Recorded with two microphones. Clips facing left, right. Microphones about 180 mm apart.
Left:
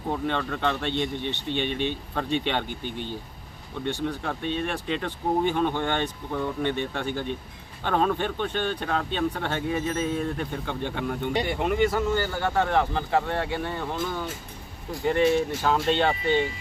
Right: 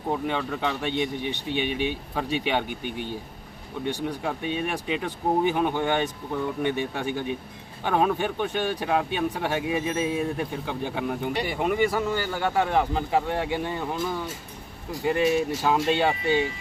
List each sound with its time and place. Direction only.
0.1 s speech: 10° right (ahead or behind)
15.0 s speech: 10° right (ahead or behind)